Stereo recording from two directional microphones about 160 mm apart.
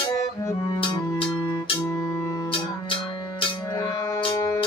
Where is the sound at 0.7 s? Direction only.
35° left (ahead or behind).